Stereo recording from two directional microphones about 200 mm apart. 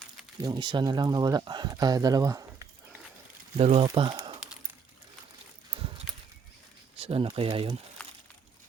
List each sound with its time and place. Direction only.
0.4 s speech: 20° right (ahead or behind)
3.6 s speech: 30° right (ahead or behind)
7.0 s speech: 30° right (ahead or behind)